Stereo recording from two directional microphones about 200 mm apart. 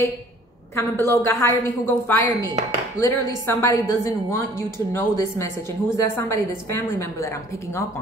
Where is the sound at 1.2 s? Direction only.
10° left (ahead or behind).